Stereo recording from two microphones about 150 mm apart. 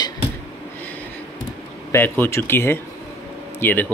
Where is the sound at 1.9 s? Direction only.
15° left (ahead or behind).